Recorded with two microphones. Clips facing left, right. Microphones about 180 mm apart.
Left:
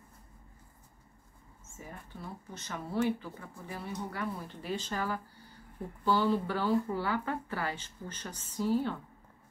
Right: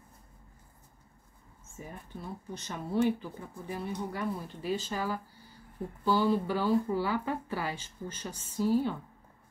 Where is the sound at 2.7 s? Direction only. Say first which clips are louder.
Right 3 dB; 15° right (ahead or behind).